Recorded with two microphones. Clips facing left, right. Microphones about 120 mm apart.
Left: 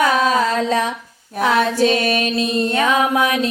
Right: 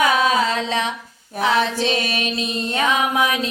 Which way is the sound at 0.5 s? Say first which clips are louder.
Left 4 dB; 45° left (ahead or behind).